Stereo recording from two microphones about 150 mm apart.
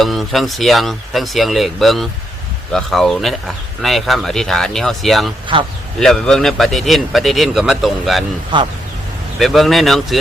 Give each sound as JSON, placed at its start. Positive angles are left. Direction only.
{"t": 0.0, "sound": "speech", "side_deg": 0}
{"t": 5.5, "sound": "speech", "side_deg": -35}
{"t": 6.0, "sound": "speech", "side_deg": 5}
{"t": 8.5, "sound": "speech", "side_deg": -35}
{"t": 9.4, "sound": "speech", "side_deg": 0}